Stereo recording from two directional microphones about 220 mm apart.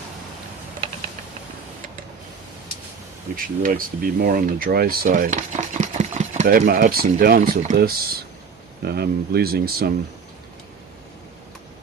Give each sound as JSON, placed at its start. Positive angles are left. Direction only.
{"t": 3.3, "sound": "speech", "side_deg": -40}